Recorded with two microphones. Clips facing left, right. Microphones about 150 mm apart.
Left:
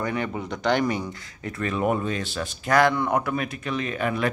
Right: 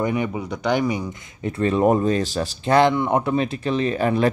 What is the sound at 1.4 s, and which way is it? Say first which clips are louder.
Speech: right 7 dB; 30° right (ahead or behind).